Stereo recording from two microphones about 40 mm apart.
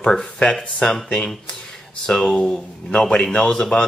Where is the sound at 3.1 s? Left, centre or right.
Left.